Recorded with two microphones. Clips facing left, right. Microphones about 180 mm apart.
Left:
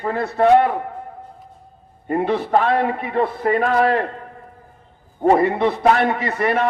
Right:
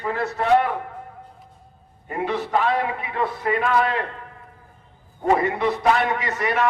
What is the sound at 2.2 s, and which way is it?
Speech, 55° left (ahead or behind).